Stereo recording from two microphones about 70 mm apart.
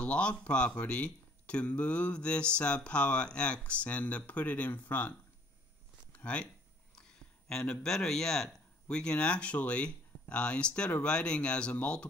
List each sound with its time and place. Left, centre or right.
0.0 s speech: centre
6.1 s speech: centre